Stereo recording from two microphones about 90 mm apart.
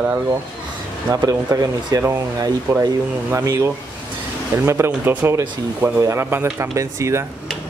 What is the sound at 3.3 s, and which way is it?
Speech, 35° right (ahead or behind).